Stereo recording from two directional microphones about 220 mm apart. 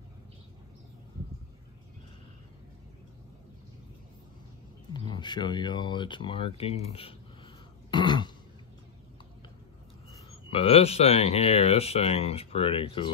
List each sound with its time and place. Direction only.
4.9 s speech: 20° left (ahead or behind)
7.9 s throat clearing: 20° left (ahead or behind)
10.5 s speech: 25° left (ahead or behind)